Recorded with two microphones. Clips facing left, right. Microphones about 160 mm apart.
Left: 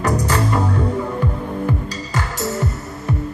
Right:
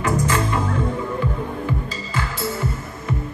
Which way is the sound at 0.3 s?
40° left (ahead or behind).